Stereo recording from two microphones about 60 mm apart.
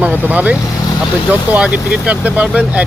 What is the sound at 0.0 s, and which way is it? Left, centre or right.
Speech, right.